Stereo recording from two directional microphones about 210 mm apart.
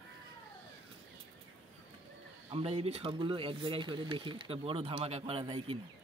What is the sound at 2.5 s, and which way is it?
Speech, 30° right (ahead or behind).